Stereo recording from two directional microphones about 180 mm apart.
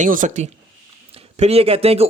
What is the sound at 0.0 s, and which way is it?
Speech, 45° right (ahead or behind).